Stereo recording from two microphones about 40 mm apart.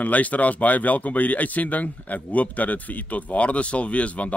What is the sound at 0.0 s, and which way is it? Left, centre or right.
Speech, left.